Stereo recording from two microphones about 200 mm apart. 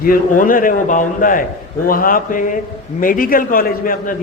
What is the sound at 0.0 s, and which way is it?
A man's voice, 45° left (ahead or behind).